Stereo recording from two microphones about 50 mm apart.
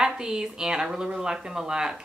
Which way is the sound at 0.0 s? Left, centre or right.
Centre.